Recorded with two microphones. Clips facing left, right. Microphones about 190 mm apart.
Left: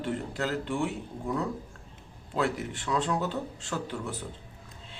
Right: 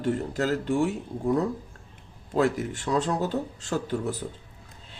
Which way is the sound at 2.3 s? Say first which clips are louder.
Right 5 dB; 40° right (ahead or behind).